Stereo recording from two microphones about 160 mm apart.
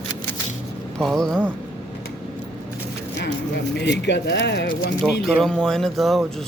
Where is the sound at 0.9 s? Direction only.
Centre (ahead or behind).